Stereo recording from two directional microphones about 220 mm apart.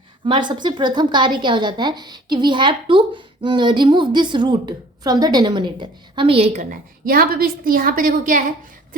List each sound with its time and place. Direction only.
0.3 s a woman's voice: 20° right (ahead or behind); by 8.4 s 35° right (ahead or behind)